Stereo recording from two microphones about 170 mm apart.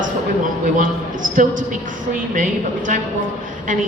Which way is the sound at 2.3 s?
50° right (ahead or behind).